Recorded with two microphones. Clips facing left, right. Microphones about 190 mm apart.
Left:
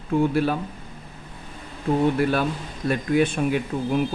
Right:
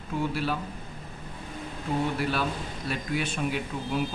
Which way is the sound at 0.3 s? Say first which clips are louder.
Left 7 dB; 50° left (ahead or behind).